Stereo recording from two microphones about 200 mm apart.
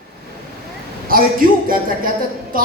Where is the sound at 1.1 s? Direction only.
45° right (ahead or behind).